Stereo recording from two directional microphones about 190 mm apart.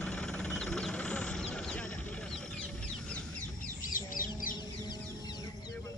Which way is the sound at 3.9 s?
45° left (ahead or behind).